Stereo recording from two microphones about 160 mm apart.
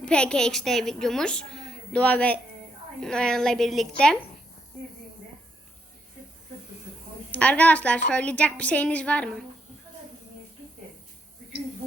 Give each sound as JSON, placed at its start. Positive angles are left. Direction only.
{"t": 0.0, "sound": "a woman's voice", "side_deg": 5}
{"t": 7.3, "sound": "a woman's voice", "side_deg": 10}